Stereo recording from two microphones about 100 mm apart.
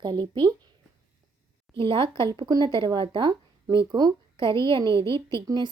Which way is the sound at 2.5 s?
45° right (ahead or behind).